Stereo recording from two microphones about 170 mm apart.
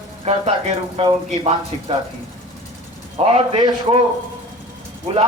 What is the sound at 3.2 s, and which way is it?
Speech, 35° right (ahead or behind).